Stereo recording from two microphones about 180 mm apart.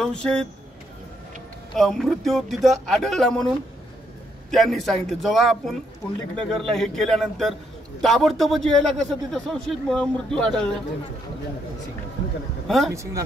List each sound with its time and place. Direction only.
0.0 s a man's voice: 5° left (ahead or behind)
1.8 s a man's voice: centre (ahead or behind)
4.5 s a man's voice: centre (ahead or behind)
12.6 s a man's voice: centre (ahead or behind)
12.9 s speech: 15° right (ahead or behind)